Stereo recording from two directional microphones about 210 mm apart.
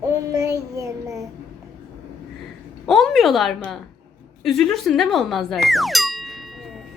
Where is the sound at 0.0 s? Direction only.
15° right (ahead or behind).